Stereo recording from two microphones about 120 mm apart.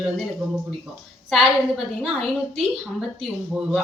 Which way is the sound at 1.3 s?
5° right (ahead or behind).